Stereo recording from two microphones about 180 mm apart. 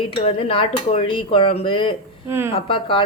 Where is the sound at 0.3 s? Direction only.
30° left (ahead or behind).